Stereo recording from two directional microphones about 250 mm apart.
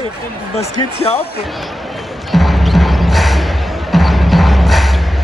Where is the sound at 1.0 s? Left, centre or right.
Left.